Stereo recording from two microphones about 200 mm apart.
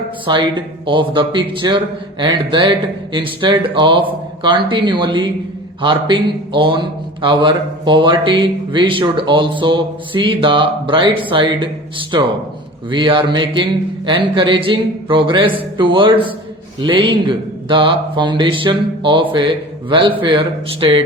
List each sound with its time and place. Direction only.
0.3 s a man's voice: 25° right (ahead or behind)